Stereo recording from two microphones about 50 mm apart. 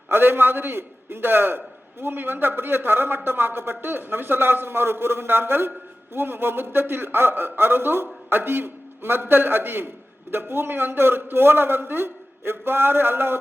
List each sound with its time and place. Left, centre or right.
0.1 s a man's voice: right